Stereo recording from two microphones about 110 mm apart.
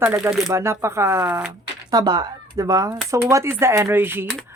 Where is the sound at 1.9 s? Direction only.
35° right (ahead or behind); by 4.3 s 20° right (ahead or behind).